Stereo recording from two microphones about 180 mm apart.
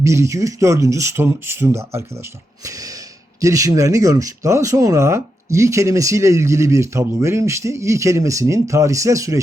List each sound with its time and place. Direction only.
0.0 s speech: 15° right (ahead or behind)
2.6 s snort: 20° right (ahead or behind)
3.4 s speech: 20° right (ahead or behind)